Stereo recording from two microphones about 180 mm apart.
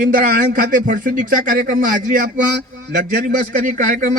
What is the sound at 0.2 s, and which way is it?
A man's voice, 50° right (ahead or behind).